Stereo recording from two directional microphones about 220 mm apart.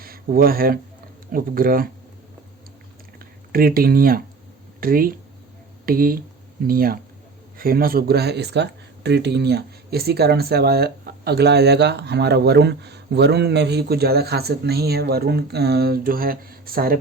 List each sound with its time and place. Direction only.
0.0 s a man's voice: 40° right (ahead or behind)
3.5 s speech: 40° right (ahead or behind)